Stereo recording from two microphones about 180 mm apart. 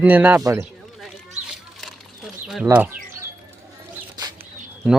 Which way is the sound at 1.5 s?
Centre (ahead or behind).